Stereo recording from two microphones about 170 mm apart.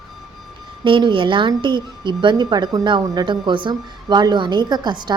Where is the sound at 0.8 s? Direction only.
30° right (ahead or behind).